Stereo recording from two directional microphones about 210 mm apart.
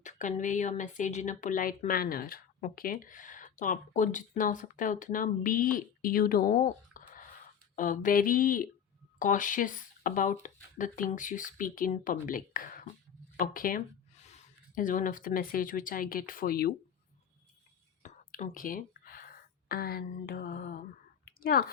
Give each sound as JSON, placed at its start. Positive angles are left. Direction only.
{"t": 0.0, "sound": "speech", "side_deg": 35}
{"t": 18.0, "sound": "whispering", "side_deg": 35}
{"t": 21.2, "sound": "a sound", "side_deg": 45}